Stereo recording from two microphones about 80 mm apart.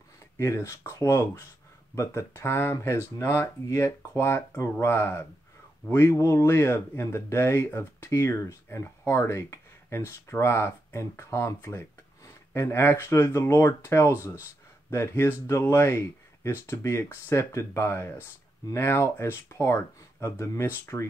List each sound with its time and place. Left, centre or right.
0.4 s speech: left